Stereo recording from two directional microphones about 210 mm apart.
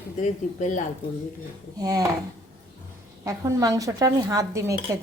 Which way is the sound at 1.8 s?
20° right (ahead or behind).